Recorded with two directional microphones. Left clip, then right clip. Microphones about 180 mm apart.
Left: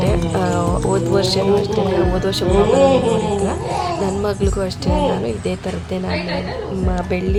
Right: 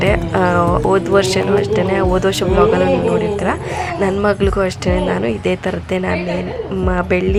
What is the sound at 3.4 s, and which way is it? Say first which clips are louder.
A woman's voice: right 1 dB; 15° right (ahead or behind).